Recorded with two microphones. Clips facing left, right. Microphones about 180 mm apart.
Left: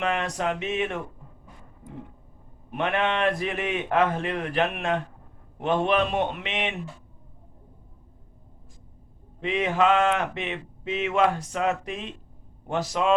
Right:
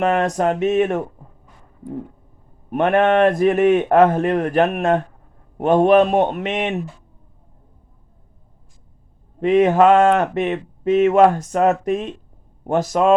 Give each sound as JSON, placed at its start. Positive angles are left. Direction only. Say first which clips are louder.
{"t": 0.0, "sound": "speech", "louder": "right 9 dB", "side_deg": -45}
{"t": 2.6, "sound": "speech", "louder": "right 10 dB", "side_deg": -45}
{"t": 9.4, "sound": "speech", "louder": "right 10 dB", "side_deg": -45}